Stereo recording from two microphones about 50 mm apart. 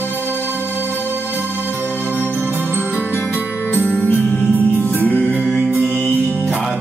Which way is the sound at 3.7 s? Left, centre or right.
Left.